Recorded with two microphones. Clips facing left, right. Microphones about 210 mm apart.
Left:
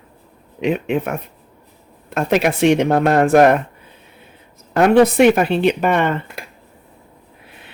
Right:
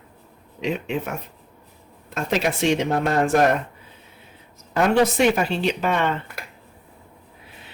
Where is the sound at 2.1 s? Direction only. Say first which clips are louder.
Left 6 dB; 60° left (ahead or behind).